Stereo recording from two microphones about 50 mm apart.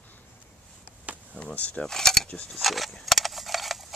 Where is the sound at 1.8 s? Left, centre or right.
Centre.